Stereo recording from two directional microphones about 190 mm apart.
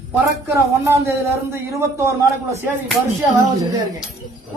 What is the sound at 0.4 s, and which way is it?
Speech, 15° right (ahead or behind).